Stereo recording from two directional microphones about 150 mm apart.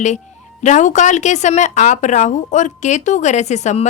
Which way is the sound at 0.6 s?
55° left (ahead or behind).